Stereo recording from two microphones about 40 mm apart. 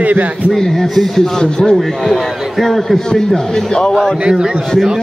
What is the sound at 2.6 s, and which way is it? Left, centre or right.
A man's voice, centre.